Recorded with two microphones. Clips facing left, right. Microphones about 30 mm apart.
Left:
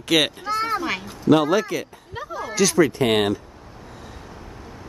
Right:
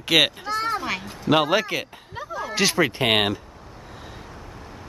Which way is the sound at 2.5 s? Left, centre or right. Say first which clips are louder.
Left 3 dB; right.